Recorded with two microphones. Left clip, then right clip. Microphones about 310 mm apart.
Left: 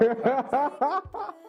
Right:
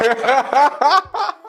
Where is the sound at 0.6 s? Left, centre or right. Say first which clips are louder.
Right 13 dB; centre.